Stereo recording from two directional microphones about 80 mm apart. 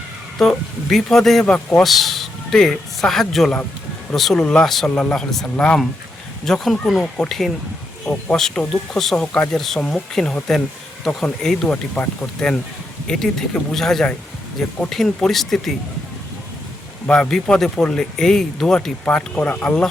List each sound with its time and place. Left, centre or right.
0.3 s speech: centre
1.8 s speech: centre
17.1 s speech: centre
19.0 s speech: centre